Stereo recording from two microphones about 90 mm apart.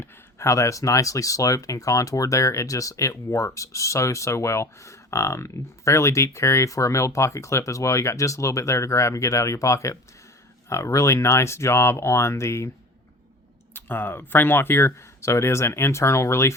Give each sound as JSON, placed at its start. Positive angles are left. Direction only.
{"t": 0.0, "sound": "speech", "side_deg": 30}
{"t": 13.7, "sound": "speech", "side_deg": 25}